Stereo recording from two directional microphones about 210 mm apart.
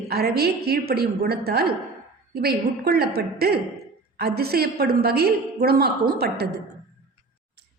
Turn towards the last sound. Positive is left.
turn(degrees=-50)  # may be behind; listen again after turning